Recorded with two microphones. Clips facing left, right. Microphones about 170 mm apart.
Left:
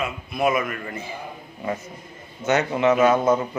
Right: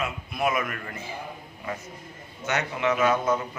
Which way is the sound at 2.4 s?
25° left (ahead or behind).